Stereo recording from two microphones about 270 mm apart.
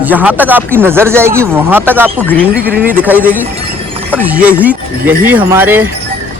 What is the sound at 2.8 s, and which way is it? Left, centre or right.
Speech, centre.